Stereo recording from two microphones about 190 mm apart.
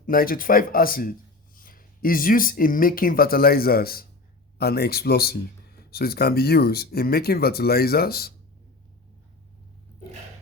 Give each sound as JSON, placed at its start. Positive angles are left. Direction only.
{"t": 0.0, "sound": "speech", "side_deg": 50}